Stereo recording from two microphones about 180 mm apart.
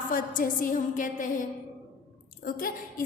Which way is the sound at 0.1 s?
50° left (ahead or behind).